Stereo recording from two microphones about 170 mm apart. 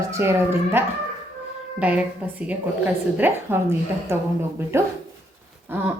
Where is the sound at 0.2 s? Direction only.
15° right (ahead or behind).